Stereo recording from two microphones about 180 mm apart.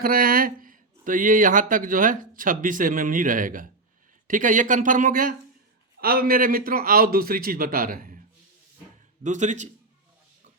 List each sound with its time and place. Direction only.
0.0 s speech: 55° right (ahead or behind)
9.2 s a man's voice: 40° right (ahead or behind)